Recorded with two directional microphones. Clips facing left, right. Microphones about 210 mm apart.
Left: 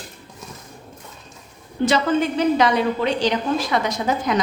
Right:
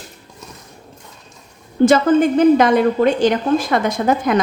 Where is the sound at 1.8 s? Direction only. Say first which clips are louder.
Right 7 dB; 50° right (ahead or behind).